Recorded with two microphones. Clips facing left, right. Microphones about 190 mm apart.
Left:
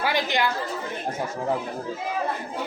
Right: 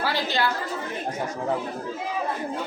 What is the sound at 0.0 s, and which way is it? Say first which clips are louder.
Chatter: left 1 dB; 15° left (ahead or behind).